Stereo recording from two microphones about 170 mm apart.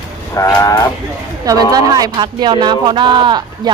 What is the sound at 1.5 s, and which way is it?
Speech, 20° right (ahead or behind).